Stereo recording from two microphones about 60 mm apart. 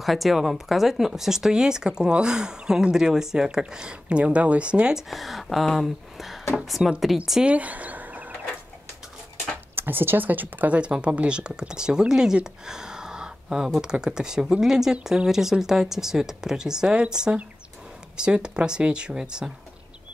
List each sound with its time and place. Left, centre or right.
0.0 s speech: centre
4.9 s speech: centre
7.4 s a sound: right
9.8 s speech: right
10.8 s speech: centre